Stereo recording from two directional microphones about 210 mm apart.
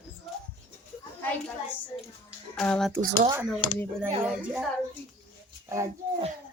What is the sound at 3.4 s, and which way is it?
Speech, 10° left (ahead or behind).